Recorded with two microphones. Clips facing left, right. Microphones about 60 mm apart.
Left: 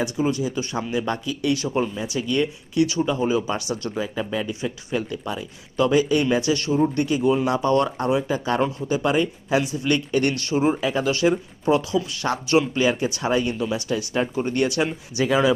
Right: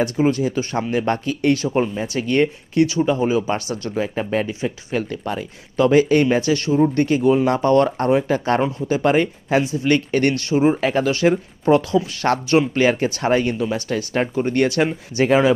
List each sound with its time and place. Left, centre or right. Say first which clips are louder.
0.0 s speech: right 5 dB; right
5.0 s speech: right 3 dB; right
9.7 s speech: right 3 dB; right
10.5 s speech: right 4 dB; right
10.8 s speech: right 3 dB; right